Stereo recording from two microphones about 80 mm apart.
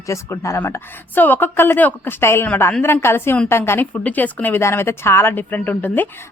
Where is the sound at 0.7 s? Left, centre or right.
Left.